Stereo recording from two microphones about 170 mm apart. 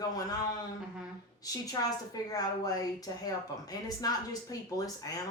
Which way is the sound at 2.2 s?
20° left (ahead or behind).